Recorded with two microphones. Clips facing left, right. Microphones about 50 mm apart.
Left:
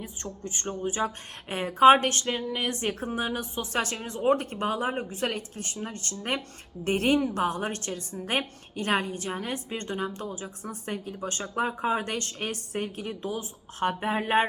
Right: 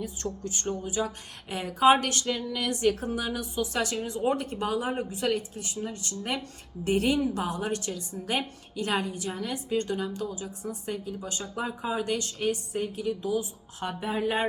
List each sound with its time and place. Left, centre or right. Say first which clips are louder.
0.0 s a woman's voice: right 4 dB; left